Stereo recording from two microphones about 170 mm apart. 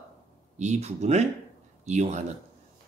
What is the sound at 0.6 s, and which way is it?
Speech, 40° right (ahead or behind).